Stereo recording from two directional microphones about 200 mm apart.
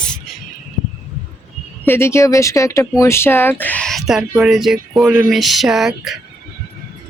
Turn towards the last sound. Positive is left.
turn(degrees=0)  # may be behind; listen again after turning